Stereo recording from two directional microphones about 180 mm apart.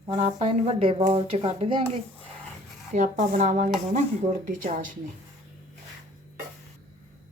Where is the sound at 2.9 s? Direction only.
45° right (ahead or behind).